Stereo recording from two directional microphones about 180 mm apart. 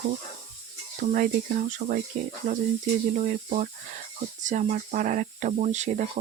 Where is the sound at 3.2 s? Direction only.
45° right (ahead or behind).